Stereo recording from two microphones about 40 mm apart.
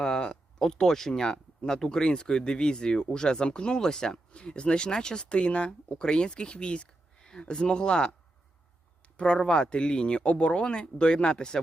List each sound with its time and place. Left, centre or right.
0.0 s a sound: centre
0.7 s speech: centre
9.1 s speech: left